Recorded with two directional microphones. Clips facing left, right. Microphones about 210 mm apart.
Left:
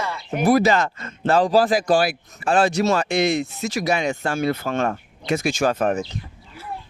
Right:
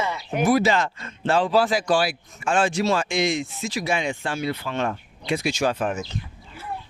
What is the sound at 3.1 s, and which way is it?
Speech, 60° left (ahead or behind).